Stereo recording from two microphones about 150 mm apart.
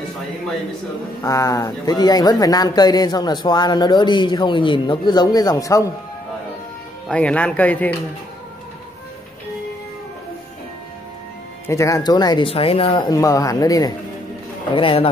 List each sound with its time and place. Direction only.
1.2 s a man's voice: 20° left (ahead or behind)
7.1 s speech: 10° left (ahead or behind)
11.6 s a man's voice: 20° left (ahead or behind)
14.8 s a man's voice: 40° left (ahead or behind)